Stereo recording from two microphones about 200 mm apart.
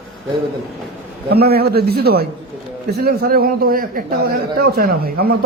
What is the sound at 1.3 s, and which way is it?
A man's voice, 50° right (ahead or behind).